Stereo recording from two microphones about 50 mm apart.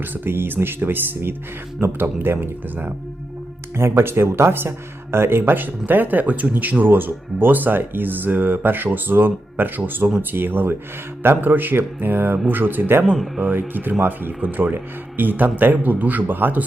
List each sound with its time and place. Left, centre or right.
0.0 s speech: right
3.8 s speech: right